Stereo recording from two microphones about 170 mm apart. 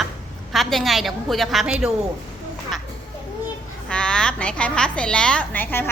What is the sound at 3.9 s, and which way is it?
A woman's voice, 5° left (ahead or behind).